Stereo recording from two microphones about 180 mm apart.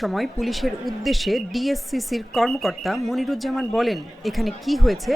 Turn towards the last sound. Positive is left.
turn(degrees=0)  # may be behind; listen again after turning